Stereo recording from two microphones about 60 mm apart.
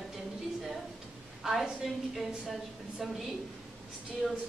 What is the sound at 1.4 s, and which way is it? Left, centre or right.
A woman's voice, centre.